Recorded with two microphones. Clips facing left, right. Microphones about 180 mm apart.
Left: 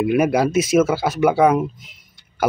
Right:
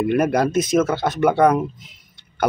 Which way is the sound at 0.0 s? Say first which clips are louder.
Left 1 dB; 5° left (ahead or behind).